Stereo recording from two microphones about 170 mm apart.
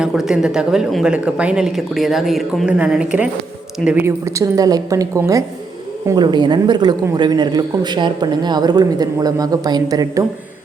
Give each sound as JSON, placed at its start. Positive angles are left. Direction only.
{"t": 0.0, "sound": "a woman's voice", "side_deg": 0}